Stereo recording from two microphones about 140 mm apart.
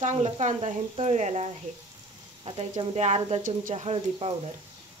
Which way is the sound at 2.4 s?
45° right (ahead or behind).